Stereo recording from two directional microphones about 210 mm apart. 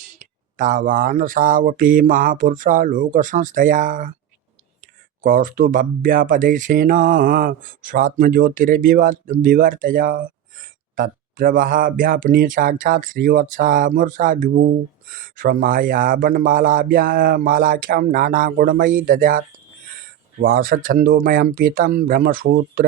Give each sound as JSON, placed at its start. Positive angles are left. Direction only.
{"t": 0.2, "sound": "speech", "side_deg": -40}
{"t": 5.2, "sound": "speech", "side_deg": -40}